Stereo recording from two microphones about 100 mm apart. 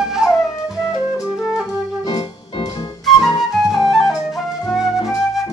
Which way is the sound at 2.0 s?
45° left (ahead or behind).